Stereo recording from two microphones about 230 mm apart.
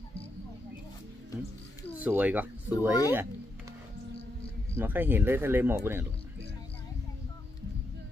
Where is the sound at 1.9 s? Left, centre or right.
Centre.